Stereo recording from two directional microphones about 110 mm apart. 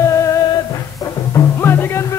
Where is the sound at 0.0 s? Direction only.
30° left (ahead or behind).